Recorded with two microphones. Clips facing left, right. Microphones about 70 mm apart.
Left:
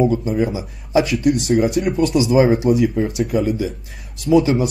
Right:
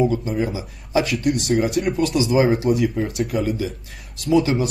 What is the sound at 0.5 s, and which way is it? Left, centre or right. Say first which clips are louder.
Speech: left 3 dB; centre.